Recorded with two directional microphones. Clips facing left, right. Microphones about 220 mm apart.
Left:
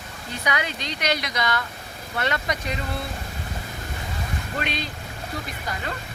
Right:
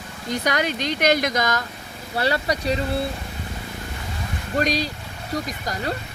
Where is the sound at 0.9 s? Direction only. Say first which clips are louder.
Right 6 dB; 50° right (ahead or behind).